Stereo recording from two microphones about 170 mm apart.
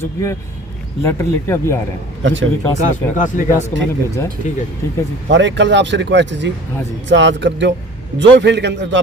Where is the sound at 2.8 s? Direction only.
45° left (ahead or behind).